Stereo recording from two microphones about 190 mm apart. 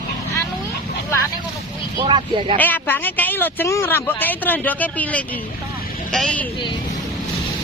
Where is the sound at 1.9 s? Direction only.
25° right (ahead or behind).